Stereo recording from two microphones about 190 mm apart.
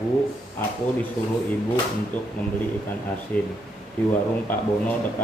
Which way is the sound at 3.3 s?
10° left (ahead or behind).